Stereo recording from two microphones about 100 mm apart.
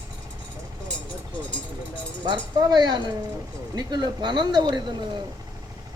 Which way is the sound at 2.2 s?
45° right (ahead or behind).